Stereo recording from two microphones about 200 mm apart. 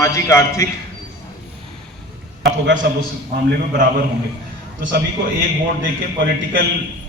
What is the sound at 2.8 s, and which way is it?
A man's voice, 55° right (ahead or behind).